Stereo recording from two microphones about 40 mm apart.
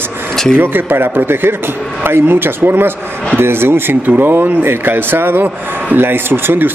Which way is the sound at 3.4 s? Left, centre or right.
Right.